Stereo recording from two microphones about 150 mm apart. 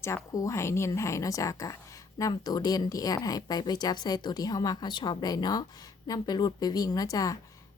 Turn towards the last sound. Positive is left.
turn(degrees=25)  # may be behind; listen again after turning